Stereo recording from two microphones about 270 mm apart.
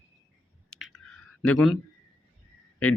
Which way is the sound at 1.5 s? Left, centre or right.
Centre.